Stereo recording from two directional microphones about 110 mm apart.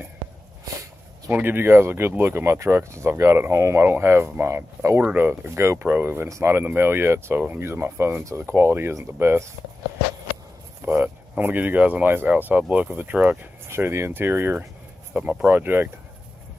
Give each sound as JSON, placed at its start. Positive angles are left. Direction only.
{"t": 1.3, "sound": "speech", "side_deg": -20}
{"t": 10.9, "sound": "speech", "side_deg": -15}